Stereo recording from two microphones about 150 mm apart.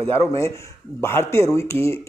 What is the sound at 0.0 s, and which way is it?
A man's voice, 20° left (ahead or behind).